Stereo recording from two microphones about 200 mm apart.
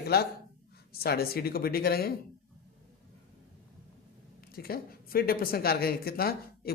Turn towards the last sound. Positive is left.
turn(degrees=50)  # may be behind; listen again after turning